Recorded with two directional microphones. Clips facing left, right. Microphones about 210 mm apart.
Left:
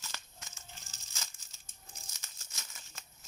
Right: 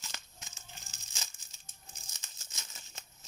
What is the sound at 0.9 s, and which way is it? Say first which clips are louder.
Crumpling: even; 20° right (ahead or behind).